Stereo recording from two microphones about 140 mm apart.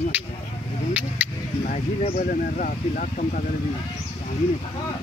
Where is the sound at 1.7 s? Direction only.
65° left (ahead or behind).